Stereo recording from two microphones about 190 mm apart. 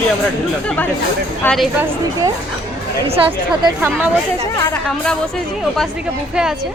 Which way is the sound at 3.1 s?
25° right (ahead or behind).